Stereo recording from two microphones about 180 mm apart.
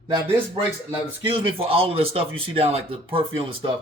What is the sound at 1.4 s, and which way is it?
Speech, 30° right (ahead or behind).